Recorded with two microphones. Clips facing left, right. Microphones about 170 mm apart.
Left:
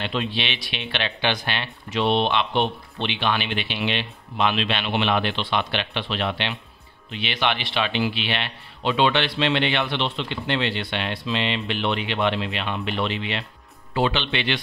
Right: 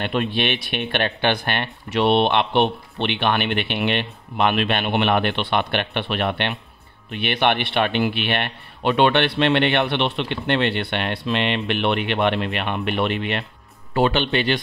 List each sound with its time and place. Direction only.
0.0 s speech: 55° right (ahead or behind)